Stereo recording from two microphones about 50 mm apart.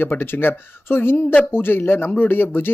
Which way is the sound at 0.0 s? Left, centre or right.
Left.